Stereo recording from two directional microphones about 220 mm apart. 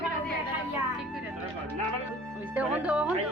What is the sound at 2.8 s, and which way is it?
Speech, 5° right (ahead or behind).